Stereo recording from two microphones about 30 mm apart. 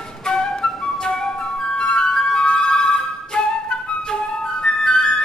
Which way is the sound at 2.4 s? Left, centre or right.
Left.